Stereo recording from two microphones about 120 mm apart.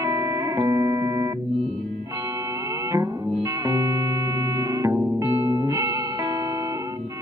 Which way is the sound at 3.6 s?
25° right (ahead or behind).